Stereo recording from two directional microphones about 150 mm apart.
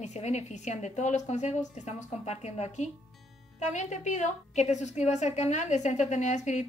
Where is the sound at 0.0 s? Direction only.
50° left (ahead or behind).